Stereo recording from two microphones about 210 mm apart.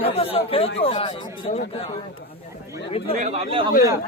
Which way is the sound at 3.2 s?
25° right (ahead or behind).